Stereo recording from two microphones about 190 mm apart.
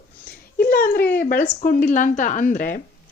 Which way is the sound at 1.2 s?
40° left (ahead or behind).